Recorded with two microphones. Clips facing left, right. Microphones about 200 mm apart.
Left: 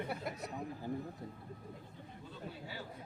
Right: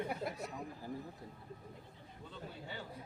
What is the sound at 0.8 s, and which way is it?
Speech, 20° left (ahead or behind).